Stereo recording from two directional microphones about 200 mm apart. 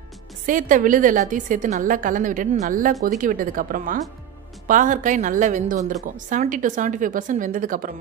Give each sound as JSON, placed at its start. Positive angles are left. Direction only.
{"t": 0.5, "sound": "a woman's voice", "side_deg": -40}